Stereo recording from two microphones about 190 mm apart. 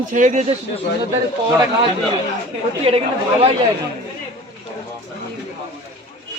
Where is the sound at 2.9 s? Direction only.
30° right (ahead or behind).